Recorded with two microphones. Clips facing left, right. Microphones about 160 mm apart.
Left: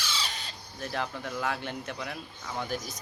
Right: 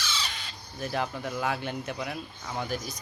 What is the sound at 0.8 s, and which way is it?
Speech, 10° right (ahead or behind).